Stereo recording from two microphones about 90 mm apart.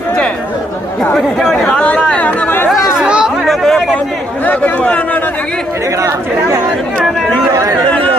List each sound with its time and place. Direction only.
1.6 s speech: 10° left (ahead or behind)
2.0 s chatter: 15° left (ahead or behind)
3.0 s chatter: 10° right (ahead or behind)
3.4 s chatter: 5° left (ahead or behind)
4.4 s a man's voice: 15° left (ahead or behind)
6.0 s speech: 40° right (ahead or behind)
7.9 s chatter: 15° left (ahead or behind)